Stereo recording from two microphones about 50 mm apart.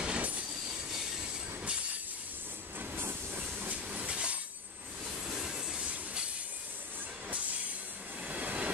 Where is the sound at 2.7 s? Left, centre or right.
Right.